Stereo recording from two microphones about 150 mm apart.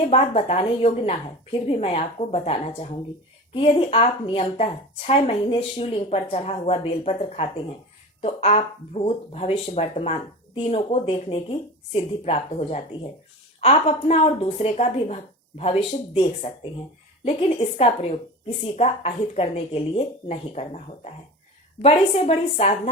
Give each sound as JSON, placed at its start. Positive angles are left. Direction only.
{"t": 0.1, "sound": "a woman's voice", "side_deg": 45}